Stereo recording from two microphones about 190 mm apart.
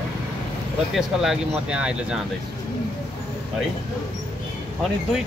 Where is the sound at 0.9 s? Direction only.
Centre (ahead or behind).